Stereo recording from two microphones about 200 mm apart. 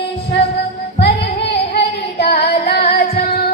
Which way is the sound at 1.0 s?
50° left (ahead or behind).